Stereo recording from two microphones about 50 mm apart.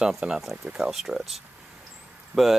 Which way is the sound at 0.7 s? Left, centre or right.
Centre.